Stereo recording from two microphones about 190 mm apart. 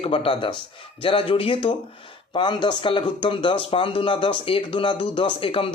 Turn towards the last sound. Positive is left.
turn(degrees=30)  # may be behind; listen again after turning